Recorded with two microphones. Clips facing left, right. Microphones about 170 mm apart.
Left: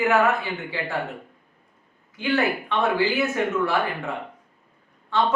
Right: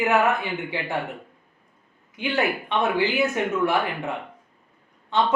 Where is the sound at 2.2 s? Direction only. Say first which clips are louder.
Left 1 dB; 20° right (ahead or behind).